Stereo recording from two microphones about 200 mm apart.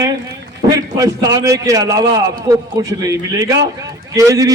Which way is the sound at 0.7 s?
20° right (ahead or behind).